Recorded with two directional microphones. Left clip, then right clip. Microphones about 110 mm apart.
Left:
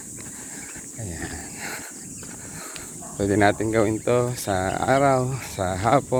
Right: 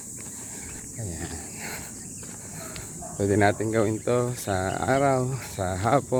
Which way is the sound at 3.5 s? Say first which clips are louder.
Left 3 dB; 10° right (ahead or behind).